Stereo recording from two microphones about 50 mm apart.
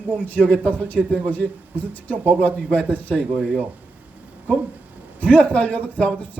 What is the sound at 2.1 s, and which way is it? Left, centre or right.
Speech, right.